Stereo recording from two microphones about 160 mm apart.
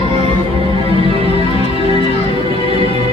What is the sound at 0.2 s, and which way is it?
Music, 40° right (ahead or behind).